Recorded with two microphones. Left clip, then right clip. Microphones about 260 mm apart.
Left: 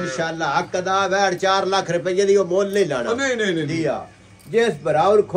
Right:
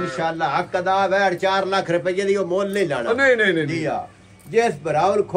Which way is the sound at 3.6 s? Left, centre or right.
Right.